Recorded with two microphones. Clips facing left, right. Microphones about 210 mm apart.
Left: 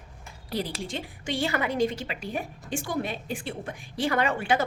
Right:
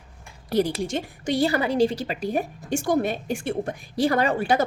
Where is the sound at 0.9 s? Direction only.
40° right (ahead or behind).